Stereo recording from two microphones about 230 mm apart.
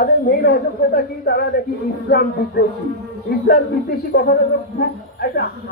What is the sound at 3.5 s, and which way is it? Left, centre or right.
A woman's voice, left.